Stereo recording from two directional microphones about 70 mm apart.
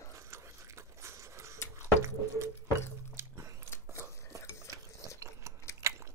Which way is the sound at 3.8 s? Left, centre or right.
Right.